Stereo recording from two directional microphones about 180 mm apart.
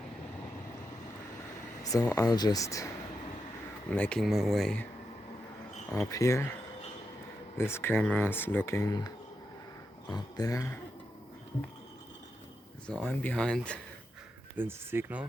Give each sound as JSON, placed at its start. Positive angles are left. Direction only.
{"t": 1.8, "sound": "a sound", "side_deg": 20}
{"t": 2.1, "sound": "speech", "side_deg": 20}
{"t": 6.1, "sound": "speech", "side_deg": 15}
{"t": 7.6, "sound": "speech", "side_deg": 15}
{"t": 12.9, "sound": "speech", "side_deg": 10}
{"t": 14.5, "sound": "speech", "side_deg": -10}